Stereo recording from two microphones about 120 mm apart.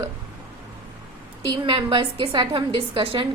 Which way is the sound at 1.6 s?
45° right (ahead or behind).